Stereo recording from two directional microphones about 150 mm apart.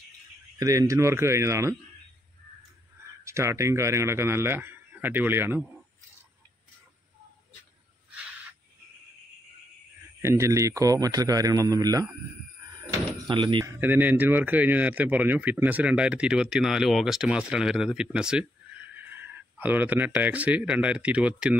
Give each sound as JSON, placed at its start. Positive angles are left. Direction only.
{"t": 0.6, "sound": "a man's voice", "side_deg": -20}
{"t": 3.3, "sound": "speech", "side_deg": -20}
{"t": 10.2, "sound": "a man's voice", "side_deg": -20}
{"t": 13.3, "sound": "speech", "side_deg": -30}
{"t": 13.7, "sound": "speech", "side_deg": -10}